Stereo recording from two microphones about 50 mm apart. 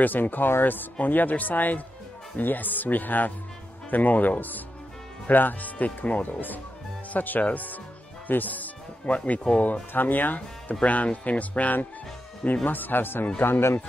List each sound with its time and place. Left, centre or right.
0.0 s speech: left
13.4 s speech: left